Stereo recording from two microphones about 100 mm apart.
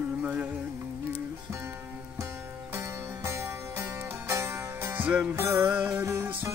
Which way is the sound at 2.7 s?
25° right (ahead or behind).